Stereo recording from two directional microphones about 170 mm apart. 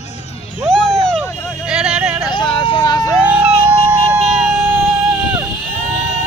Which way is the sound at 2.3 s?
30° left (ahead or behind).